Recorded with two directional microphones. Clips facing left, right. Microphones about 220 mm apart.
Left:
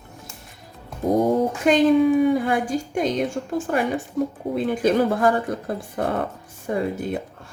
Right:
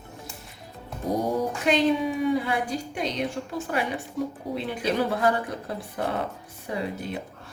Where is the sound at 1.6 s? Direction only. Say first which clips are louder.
Left 7 dB; 50° left (ahead or behind).